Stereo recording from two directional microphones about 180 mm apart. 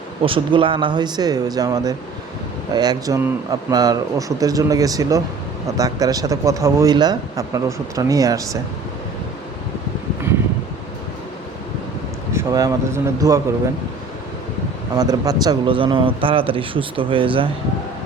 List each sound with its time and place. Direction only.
0.3 s a man's voice: 30° right (ahead or behind)
12.3 s speech: 15° right (ahead or behind)
14.9 s a man's voice: 20° right (ahead or behind)